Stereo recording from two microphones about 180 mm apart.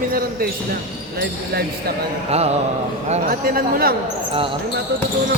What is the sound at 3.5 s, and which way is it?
Speech, 55° right (ahead or behind).